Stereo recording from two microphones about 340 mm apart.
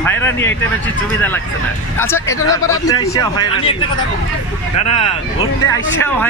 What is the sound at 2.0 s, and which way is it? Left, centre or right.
A man's voice, centre.